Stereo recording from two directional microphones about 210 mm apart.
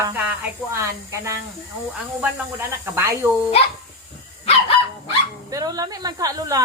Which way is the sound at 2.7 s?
10° right (ahead or behind).